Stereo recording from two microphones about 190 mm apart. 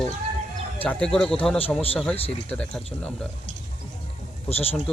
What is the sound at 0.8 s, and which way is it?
Speech, 5° left (ahead or behind).